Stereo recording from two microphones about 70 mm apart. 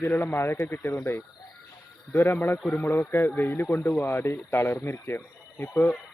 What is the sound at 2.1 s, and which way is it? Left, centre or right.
A man's voice, left.